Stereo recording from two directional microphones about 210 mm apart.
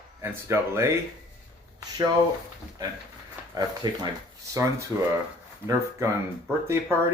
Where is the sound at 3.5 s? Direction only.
15° right (ahead or behind).